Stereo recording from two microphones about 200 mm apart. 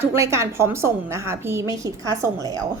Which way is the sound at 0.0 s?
10° right (ahead or behind).